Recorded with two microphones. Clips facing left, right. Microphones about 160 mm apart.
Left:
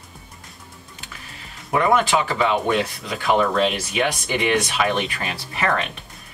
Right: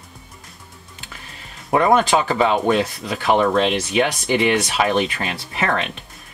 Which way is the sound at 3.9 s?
35° right (ahead or behind).